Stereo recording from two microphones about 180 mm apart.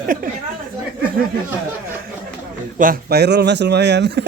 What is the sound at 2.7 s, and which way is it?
Speech, 55° right (ahead or behind).